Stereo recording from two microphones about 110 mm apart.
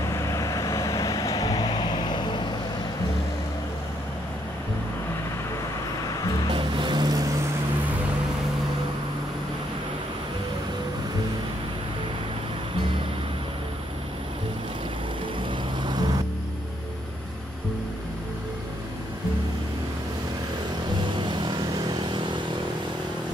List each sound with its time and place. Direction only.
0.1 s vehicle: 25° left (ahead or behind); by 2.4 s 40° left (ahead or behind)
6.5 s music: 50° right (ahead or behind)
15.8 s vehicle: 40° right (ahead or behind)
21.2 s vehicle: 45° right (ahead or behind)